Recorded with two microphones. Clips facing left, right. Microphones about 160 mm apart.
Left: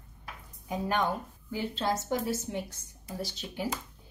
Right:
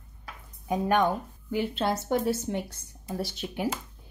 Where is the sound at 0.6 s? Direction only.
60° right (ahead or behind).